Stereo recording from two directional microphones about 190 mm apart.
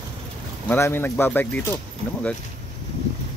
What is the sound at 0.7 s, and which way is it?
Speech, 10° left (ahead or behind).